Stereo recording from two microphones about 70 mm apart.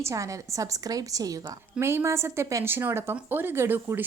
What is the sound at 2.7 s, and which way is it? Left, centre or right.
Speech, right.